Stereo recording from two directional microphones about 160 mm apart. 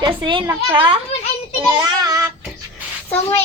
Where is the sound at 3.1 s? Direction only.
15° left (ahead or behind).